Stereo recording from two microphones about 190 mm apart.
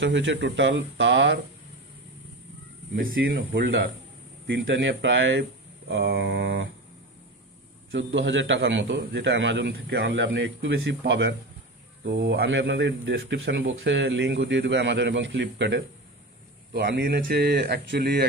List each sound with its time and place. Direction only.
0.0 s speech: 70° right (ahead or behind)
3.3 s speech: 85° right; by 6.7 s 65° right (ahead or behind)
7.9 s speech: 75° right (ahead or behind)
16.8 s speech: 60° right (ahead or behind)